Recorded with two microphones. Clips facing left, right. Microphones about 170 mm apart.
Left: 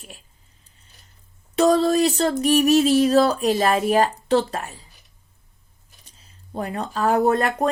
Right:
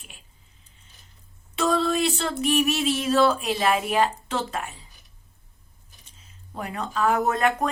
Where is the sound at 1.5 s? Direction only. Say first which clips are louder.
Left 6 dB; 40° left (ahead or behind).